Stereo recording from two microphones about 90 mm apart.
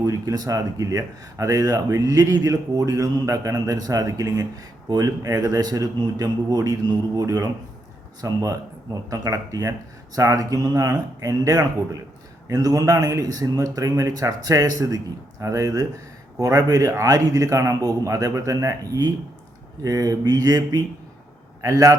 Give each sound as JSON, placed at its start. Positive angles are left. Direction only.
{"t": 0.0, "sound": "speech", "side_deg": -40}